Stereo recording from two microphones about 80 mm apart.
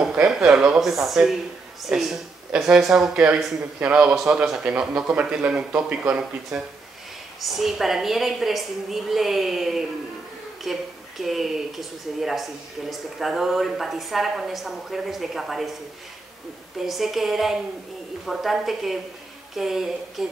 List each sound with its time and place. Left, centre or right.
0.3 s speech: centre
3.8 s speech: centre
7.3 s a woman's voice: centre
16.8 s a woman's voice: centre